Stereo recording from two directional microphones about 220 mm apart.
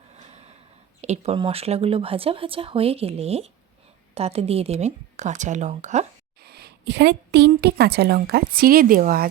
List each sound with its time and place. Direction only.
0.1 s snort: 30° right (ahead or behind)
1.0 s speech: 30° right (ahead or behind)
6.4 s a woman's voice: 45° right (ahead or behind)